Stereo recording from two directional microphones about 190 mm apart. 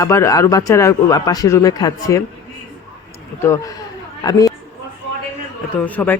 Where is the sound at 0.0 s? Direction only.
15° left (ahead or behind).